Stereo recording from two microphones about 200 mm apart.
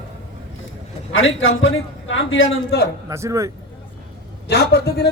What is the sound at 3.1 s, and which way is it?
Speech, 15° right (ahead or behind).